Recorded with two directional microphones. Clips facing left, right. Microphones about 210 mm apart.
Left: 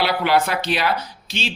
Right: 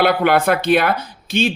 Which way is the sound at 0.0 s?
55° right (ahead or behind).